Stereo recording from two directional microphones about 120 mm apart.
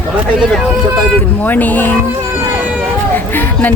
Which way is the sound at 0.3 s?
5° right (ahead or behind).